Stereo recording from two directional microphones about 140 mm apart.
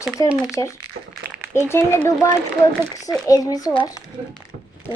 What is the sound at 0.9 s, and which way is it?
Speech, 90° right.